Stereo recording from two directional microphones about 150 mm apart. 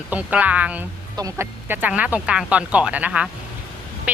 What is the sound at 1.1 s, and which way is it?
Speech, 20° right (ahead or behind).